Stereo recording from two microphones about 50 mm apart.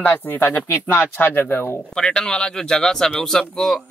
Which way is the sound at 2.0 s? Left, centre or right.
Centre.